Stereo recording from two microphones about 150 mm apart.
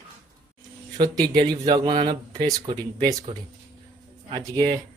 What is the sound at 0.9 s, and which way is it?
Speech, 25° right (ahead or behind).